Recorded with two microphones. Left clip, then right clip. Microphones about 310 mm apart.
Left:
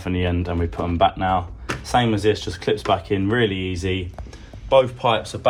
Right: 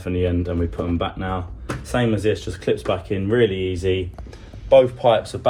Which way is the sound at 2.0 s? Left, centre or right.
Left.